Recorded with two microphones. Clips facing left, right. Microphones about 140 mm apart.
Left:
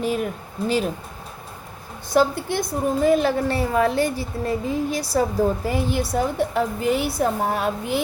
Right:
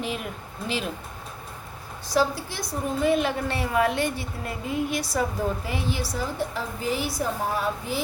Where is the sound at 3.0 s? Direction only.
35° left (ahead or behind).